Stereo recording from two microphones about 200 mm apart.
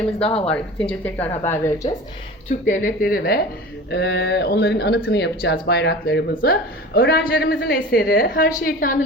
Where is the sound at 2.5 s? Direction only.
40° left (ahead or behind).